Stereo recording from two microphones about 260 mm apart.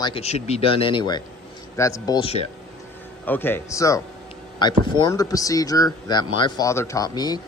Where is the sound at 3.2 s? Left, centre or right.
Centre.